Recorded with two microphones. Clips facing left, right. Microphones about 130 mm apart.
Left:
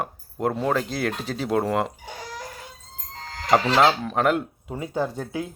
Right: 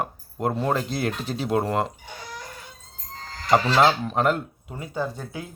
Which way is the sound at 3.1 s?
90° left.